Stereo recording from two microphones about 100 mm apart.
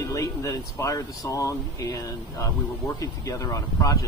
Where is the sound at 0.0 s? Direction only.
30° left (ahead or behind).